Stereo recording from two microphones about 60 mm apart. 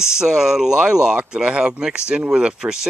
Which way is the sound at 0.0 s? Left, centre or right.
Centre.